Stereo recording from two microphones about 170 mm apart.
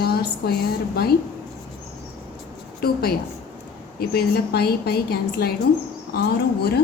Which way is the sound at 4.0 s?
65° left (ahead or behind).